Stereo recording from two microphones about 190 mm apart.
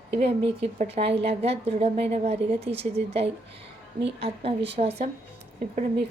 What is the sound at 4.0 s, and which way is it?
Speech, 65° right (ahead or behind).